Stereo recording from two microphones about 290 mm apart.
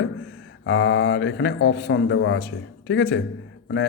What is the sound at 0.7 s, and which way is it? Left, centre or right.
Speech, left.